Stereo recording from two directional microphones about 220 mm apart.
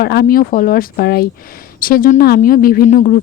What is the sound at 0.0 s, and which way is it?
Speech, 45° left (ahead or behind).